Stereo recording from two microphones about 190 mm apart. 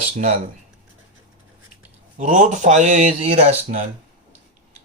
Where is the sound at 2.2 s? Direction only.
40° right (ahead or behind).